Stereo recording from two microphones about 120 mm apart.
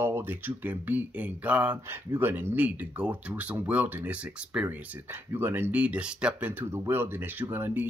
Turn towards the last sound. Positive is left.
turn(degrees=-20)  # may be behind; listen again after turning